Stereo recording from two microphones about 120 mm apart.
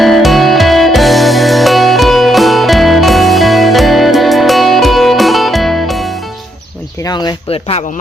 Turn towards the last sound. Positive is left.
turn(degrees=55)  # may be behind; listen again after turning